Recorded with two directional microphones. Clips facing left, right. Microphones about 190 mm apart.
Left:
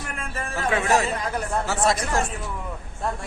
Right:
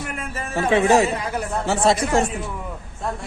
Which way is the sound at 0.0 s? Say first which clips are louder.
Right 3 dB; 5° right (ahead or behind).